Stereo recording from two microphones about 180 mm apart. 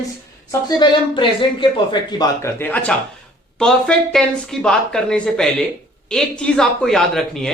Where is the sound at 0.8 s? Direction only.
25° left (ahead or behind).